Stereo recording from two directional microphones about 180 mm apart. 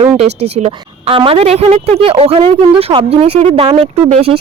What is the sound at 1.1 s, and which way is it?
Speech, 30° right (ahead or behind).